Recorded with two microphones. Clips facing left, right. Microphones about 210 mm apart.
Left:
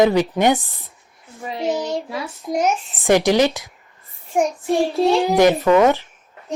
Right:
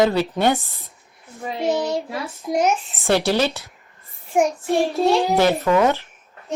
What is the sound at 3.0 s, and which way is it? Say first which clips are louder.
Speech: left 4 dB; 15° left (ahead or behind).